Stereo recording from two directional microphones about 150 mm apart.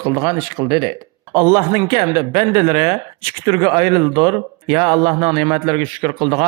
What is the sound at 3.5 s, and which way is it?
A man's voice, 30° right (ahead or behind).